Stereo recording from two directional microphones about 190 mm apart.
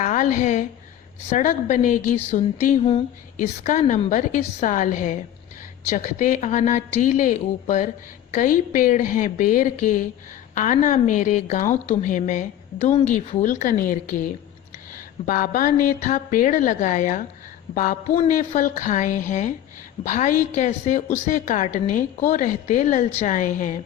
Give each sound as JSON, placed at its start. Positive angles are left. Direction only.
{"t": 0.0, "sound": "a woman's voice", "side_deg": 45}